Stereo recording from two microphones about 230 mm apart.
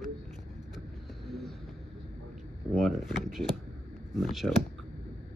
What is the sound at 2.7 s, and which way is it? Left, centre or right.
Speech, centre.